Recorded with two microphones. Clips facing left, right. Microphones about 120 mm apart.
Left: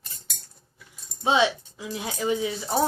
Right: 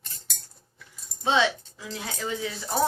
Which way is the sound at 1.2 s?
15° left (ahead or behind).